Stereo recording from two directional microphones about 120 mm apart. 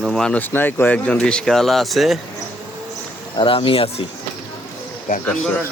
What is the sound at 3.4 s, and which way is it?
Speech, 45° left (ahead or behind).